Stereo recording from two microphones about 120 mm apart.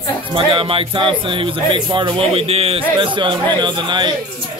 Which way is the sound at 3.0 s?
40° right (ahead or behind).